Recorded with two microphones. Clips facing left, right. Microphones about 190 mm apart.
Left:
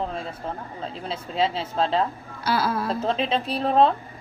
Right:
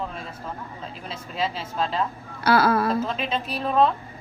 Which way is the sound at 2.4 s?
60° right (ahead or behind).